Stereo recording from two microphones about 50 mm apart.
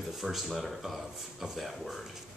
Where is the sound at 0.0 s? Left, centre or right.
Centre.